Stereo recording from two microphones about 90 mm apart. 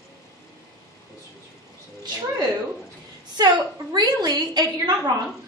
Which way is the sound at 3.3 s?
55° right (ahead or behind).